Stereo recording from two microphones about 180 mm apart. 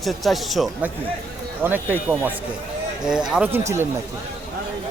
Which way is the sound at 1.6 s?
10° right (ahead or behind).